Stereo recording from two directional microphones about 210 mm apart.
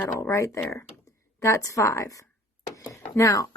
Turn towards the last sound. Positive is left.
turn(degrees=15)  # may be behind; listen again after turning